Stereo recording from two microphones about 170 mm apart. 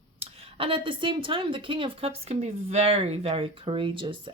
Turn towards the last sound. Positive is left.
turn(degrees=-30)  # may be behind; listen again after turning